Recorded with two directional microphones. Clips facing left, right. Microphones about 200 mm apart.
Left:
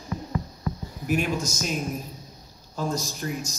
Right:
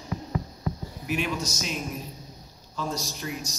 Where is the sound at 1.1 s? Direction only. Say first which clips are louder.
Left 3 dB; 45° left (ahead or behind).